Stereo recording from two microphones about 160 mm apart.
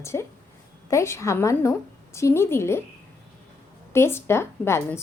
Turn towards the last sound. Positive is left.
turn(degrees=15)  # may be behind; listen again after turning